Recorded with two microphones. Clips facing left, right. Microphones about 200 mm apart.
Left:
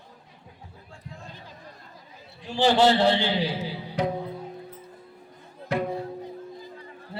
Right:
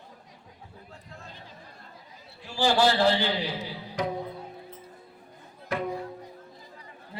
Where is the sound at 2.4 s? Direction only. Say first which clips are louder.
Left 3 dB; 20° left (ahead or behind).